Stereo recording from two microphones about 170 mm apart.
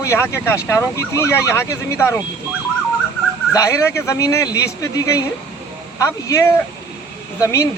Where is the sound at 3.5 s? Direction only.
20° left (ahead or behind).